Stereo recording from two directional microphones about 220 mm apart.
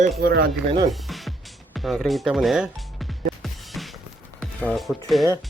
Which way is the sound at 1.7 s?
Centre (ahead or behind).